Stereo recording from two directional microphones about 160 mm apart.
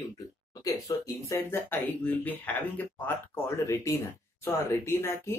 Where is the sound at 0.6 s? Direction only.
20° left (ahead or behind).